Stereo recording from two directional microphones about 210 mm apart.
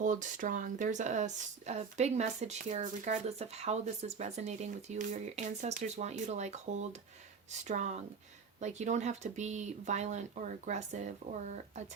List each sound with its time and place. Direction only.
0.0 s speech: 35° right (ahead or behind)